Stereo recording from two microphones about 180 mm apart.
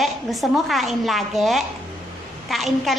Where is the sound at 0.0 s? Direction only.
Centre (ahead or behind).